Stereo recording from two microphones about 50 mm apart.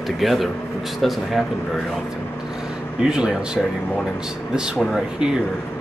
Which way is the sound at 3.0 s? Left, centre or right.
Centre.